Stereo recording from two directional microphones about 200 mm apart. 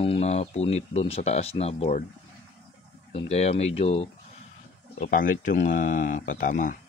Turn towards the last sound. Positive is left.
turn(degrees=40)  # may be behind; listen again after turning